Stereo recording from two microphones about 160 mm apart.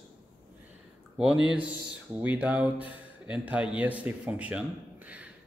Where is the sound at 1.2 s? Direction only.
5° right (ahead or behind).